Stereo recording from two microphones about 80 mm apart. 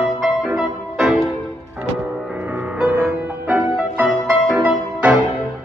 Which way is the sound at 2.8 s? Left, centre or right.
Centre.